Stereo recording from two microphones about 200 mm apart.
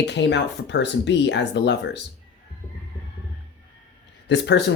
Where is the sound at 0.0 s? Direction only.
60° left (ahead or behind).